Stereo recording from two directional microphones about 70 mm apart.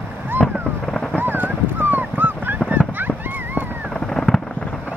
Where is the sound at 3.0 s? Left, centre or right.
Right.